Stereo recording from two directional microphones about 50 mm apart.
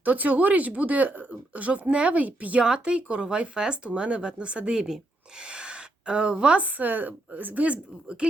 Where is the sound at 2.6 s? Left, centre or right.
Centre.